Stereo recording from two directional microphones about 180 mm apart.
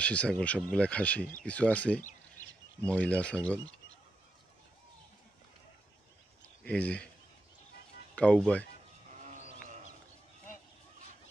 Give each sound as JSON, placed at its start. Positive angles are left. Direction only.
{"t": 0.0, "sound": "speech", "side_deg": 5}
{"t": 6.6, "sound": "speech", "side_deg": 5}
{"t": 8.2, "sound": "speech", "side_deg": 5}
{"t": 9.1, "sound": "sheep", "side_deg": -45}